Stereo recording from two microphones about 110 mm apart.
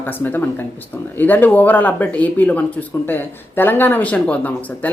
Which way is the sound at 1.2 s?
15° left (ahead or behind).